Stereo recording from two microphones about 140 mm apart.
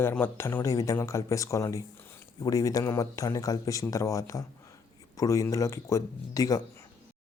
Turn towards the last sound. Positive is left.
turn(degrees=25)  # may be behind; listen again after turning